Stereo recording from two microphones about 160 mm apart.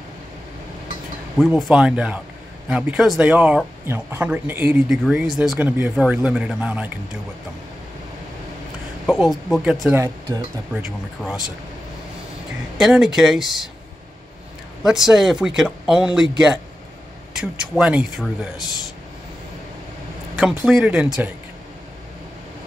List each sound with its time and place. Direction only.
1.4 s speech: centre (ahead or behind)
5.1 s speech: centre (ahead or behind)
9.0 s speech: centre (ahead or behind)
9.8 s speech: 15° right (ahead or behind)
10.7 s speech: 5° right (ahead or behind)
12.7 s speech: centre (ahead or behind)
14.8 s speech: 5° right (ahead or behind)
20.3 s speech: centre (ahead or behind)